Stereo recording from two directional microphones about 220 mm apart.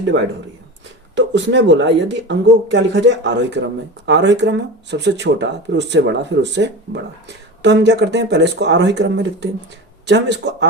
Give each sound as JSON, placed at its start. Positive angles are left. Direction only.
{"t": 0.0, "sound": "speech", "side_deg": -55}